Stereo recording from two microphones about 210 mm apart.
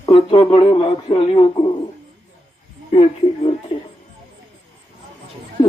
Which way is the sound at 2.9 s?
25° left (ahead or behind).